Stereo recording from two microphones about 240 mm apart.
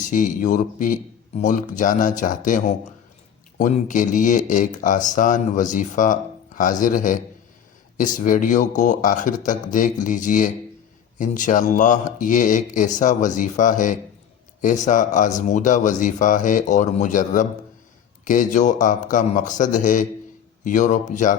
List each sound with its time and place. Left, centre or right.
0.0 s speech: left
3.6 s speech: left